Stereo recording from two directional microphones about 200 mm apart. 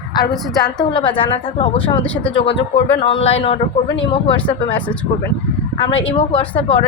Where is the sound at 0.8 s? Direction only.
25° left (ahead or behind).